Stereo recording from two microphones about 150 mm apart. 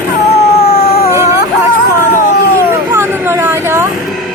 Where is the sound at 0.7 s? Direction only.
45° left (ahead or behind).